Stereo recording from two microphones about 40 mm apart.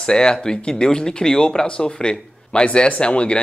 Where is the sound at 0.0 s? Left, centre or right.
Left.